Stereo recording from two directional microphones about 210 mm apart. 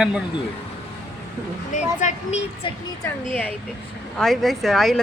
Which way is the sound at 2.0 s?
30° left (ahead or behind).